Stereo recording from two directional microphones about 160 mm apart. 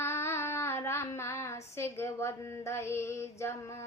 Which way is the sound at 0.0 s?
15° left (ahead or behind).